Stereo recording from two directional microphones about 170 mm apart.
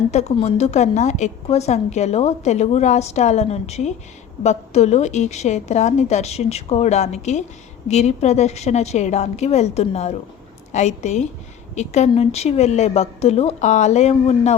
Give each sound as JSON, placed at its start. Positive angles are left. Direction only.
{"t": 0.1, "sound": "a woman's voice", "side_deg": 40}